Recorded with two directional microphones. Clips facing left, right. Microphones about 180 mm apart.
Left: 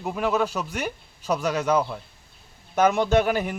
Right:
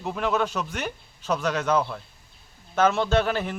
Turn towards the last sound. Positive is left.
turn(degrees=10)  # may be behind; listen again after turning